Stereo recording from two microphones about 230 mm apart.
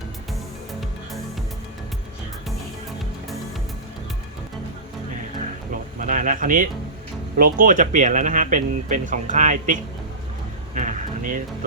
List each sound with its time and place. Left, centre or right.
0.7 s music: centre
6.0 s speech: right
10.8 s a sound: right